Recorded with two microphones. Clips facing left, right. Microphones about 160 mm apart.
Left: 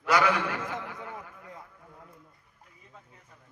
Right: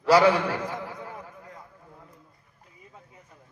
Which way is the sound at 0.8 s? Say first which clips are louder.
Right 2 dB; 30° right (ahead or behind).